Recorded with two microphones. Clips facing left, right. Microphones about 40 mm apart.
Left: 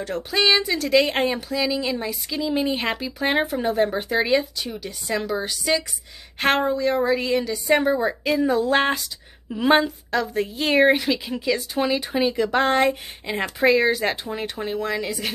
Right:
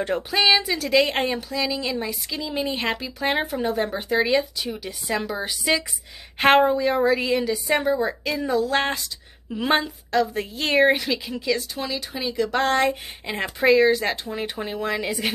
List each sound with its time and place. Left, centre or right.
0.3 s a woman's voice: centre
11.7 s speech: left
12.4 s a woman's voice: centre